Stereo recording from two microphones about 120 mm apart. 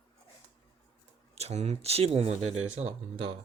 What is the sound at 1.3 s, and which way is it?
Speech, 60° right (ahead or behind).